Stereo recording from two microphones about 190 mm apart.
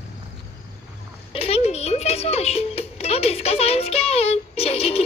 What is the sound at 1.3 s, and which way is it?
Speech, 30° left (ahead or behind).